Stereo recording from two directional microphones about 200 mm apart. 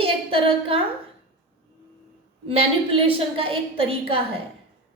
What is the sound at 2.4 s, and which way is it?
A woman's voice, 30° right (ahead or behind).